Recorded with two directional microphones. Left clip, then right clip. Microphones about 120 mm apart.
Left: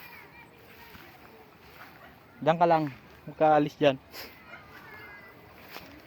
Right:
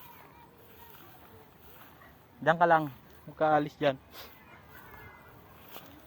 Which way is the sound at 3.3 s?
80° left.